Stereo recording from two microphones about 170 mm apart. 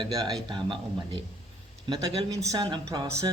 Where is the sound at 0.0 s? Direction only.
25° right (ahead or behind).